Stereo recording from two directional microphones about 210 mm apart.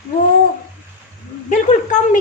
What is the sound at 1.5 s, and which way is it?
Speech, 35° left (ahead or behind).